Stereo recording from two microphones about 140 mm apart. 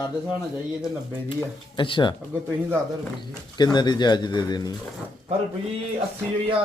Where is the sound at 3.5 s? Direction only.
30° left (ahead or behind).